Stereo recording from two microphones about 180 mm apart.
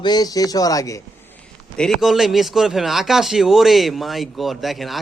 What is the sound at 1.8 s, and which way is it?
Speech, centre (ahead or behind).